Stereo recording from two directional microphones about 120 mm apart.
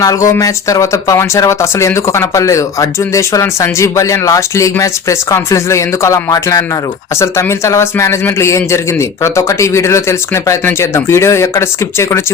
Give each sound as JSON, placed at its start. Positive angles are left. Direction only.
{"t": 0.0, "sound": "speech", "side_deg": 30}